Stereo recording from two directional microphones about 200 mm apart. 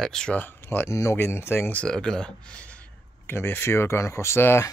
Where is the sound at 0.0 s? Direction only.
5° left (ahead or behind).